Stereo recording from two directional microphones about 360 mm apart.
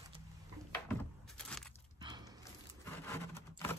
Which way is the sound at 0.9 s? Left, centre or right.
Centre.